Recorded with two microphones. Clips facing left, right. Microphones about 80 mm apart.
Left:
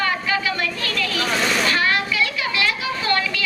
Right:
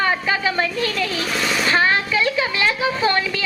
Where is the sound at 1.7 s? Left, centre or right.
Right.